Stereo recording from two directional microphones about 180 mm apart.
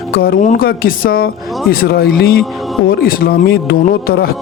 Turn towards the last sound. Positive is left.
turn(degrees=55)  # may be behind; listen again after turning